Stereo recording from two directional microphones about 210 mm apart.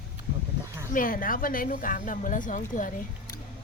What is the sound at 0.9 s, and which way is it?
Speech, 40° left (ahead or behind).